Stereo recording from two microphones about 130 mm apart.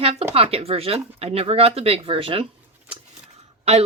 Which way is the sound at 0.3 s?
50° right (ahead or behind).